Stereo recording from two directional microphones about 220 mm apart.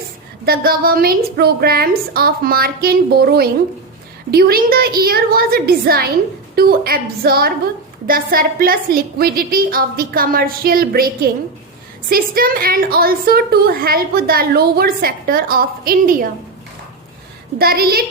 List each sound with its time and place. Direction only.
0.4 s a woman's voice: 40° right (ahead or behind)
17.6 s a woman's voice: 45° right (ahead or behind)